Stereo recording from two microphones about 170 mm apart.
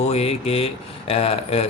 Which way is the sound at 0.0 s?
40° left (ahead or behind).